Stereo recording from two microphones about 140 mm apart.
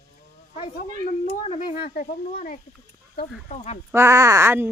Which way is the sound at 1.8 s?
90° left.